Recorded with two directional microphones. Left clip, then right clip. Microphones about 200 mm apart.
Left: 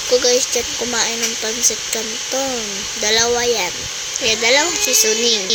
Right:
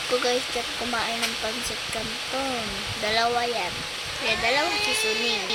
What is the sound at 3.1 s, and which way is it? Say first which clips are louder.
Speech: left 8 dB; 20° left (ahead or behind).